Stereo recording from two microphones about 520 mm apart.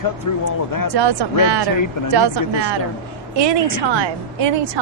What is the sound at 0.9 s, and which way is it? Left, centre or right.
A woman's voice, right.